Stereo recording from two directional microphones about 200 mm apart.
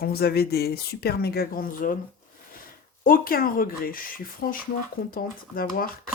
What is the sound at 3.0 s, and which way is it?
Speech, 45° left (ahead or behind).